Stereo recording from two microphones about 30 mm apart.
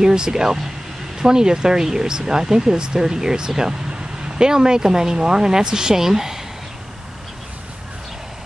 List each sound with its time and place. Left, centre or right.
0.0 s speech: right